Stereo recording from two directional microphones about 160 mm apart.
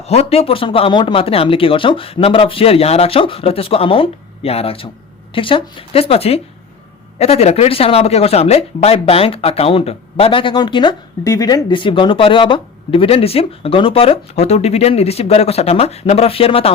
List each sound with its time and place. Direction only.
0.1 s speech: 40° left (ahead or behind)